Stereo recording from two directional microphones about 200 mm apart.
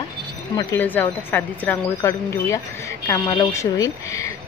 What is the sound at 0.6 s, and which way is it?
Speech, 15° left (ahead or behind).